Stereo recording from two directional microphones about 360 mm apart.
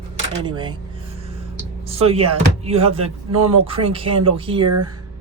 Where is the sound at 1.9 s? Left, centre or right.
Centre.